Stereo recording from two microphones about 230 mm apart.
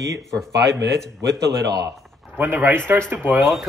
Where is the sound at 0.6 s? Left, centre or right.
Right.